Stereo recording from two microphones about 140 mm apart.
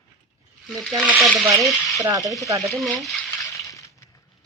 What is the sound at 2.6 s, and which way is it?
Frying, centre (ahead or behind).